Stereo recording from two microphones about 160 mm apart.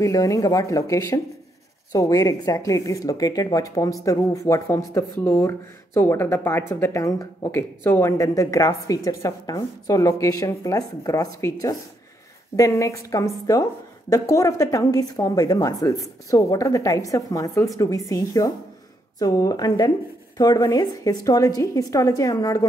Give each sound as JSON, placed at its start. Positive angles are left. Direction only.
{"t": 0.0, "sound": "speech", "side_deg": 20}